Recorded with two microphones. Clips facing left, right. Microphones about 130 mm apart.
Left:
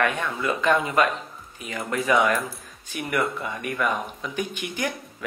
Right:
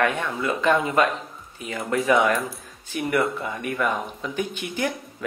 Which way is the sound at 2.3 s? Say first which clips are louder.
Right 1 dB; centre (ahead or behind).